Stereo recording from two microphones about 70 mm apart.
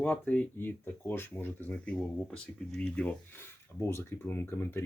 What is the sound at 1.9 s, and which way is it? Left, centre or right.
Speech, centre.